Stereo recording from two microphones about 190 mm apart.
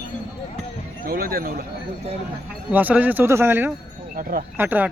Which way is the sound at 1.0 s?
50° right (ahead or behind).